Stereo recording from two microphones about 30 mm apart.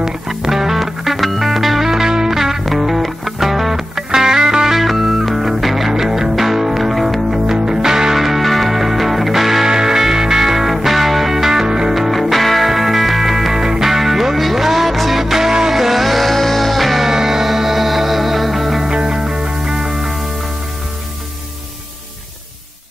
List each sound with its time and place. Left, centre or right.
0.3 s music: centre
1.9 s music: centre
3.9 s music: centre
4.7 s music: centre
5.9 s music: centre
7.5 s music: right
8.2 s music: centre
11.9 s music: centre
17.0 s music: centre
19.1 s music: centre